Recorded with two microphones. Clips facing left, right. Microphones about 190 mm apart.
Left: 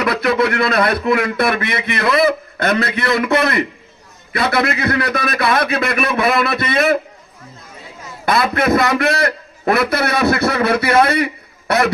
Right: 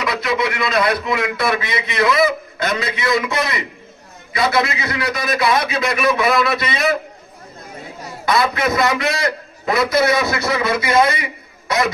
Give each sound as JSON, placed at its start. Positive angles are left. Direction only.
{"t": 0.0, "sound": "a man's voice", "side_deg": 55}
{"t": 8.3, "sound": "a man's voice", "side_deg": 55}